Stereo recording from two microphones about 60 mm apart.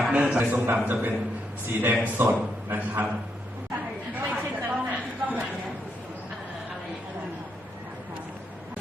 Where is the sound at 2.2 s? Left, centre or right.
Right.